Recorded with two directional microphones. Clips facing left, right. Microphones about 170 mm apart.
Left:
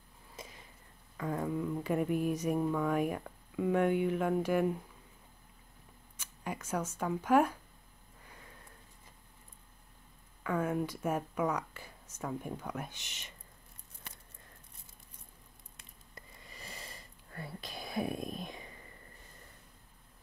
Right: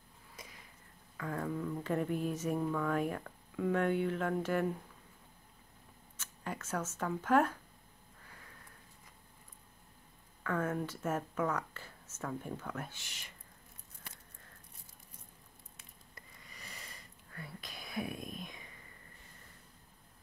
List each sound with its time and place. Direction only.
0.4 s a sound: 25° left (ahead or behind)
1.1 s speech: 20° left (ahead or behind)
6.1 s speech: 10° left (ahead or behind)
10.4 s speech: 15° left (ahead or behind)
16.2 s whispering: 30° left (ahead or behind)